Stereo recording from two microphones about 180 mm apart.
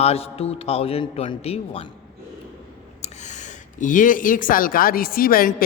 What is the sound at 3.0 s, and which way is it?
Speech, 40° left (ahead or behind).